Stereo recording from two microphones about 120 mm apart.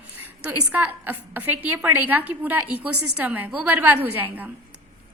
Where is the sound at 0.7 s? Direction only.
15° right (ahead or behind).